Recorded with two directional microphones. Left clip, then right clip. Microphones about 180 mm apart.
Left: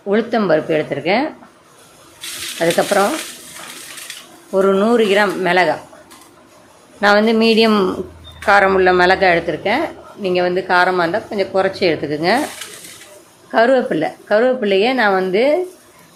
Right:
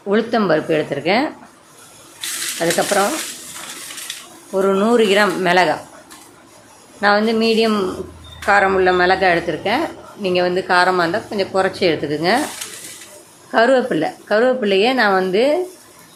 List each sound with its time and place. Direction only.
0.1 s a woman's voice: centre (ahead or behind)
2.6 s a woman's voice: 10° left (ahead or behind)
4.5 s a woman's voice: 10° left (ahead or behind)
7.0 s a woman's voice: 15° left (ahead or behind)
13.5 s a woman's voice: 5° left (ahead or behind)